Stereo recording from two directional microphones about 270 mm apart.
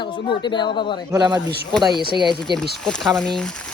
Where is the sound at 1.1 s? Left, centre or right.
Centre.